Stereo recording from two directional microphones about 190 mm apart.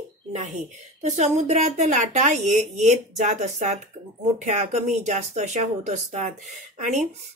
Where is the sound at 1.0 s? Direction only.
35° right (ahead or behind).